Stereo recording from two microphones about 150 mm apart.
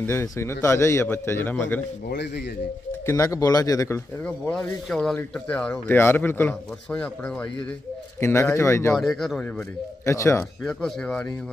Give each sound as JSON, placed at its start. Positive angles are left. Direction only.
{"t": 0.0, "sound": "speech", "side_deg": 15}
{"t": 3.1, "sound": "speech", "side_deg": 20}
{"t": 4.2, "sound": "speech", "side_deg": 5}
{"t": 8.2, "sound": "speech", "side_deg": 20}
{"t": 8.9, "sound": "speech", "side_deg": 0}
{"t": 10.0, "sound": "speech", "side_deg": 20}
{"t": 10.6, "sound": "speech", "side_deg": 5}